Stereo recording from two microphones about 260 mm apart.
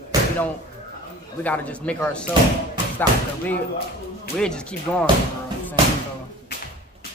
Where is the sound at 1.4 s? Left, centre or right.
Centre.